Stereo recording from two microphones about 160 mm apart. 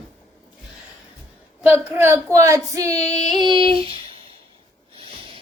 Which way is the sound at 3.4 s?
30° right (ahead or behind).